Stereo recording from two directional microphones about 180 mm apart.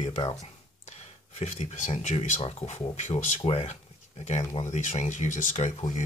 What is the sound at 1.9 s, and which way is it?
Speech, 35° left (ahead or behind).